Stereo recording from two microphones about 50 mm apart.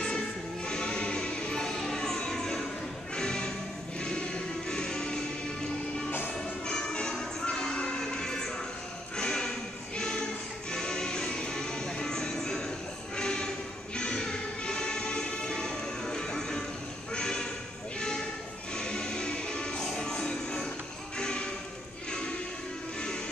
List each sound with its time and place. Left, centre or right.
0.7 s music: centre
6.0 s music: left
6.3 s music: centre
9.1 s a sound: centre
9.9 s music: centre